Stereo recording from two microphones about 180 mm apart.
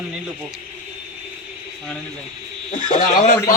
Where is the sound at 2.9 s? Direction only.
50° left (ahead or behind).